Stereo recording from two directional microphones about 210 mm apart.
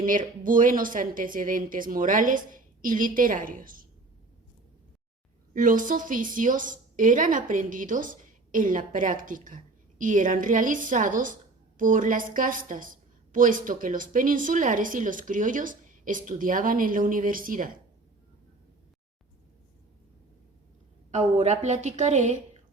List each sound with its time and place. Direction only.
0.0 s a woman's voice: 40° right (ahead or behind)
5.5 s a woman's voice: 40° right (ahead or behind)
21.1 s a woman's voice: 35° right (ahead or behind)